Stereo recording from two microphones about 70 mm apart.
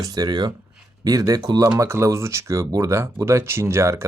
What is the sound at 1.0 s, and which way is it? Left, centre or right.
Speech, right.